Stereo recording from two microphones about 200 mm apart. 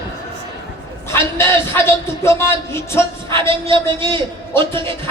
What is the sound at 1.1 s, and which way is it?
A man's voice, 15° left (ahead or behind).